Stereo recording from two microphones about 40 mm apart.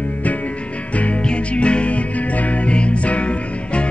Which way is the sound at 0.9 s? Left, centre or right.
Left.